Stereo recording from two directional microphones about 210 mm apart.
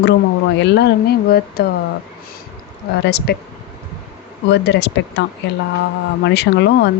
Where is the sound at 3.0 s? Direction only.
50° left (ahead or behind).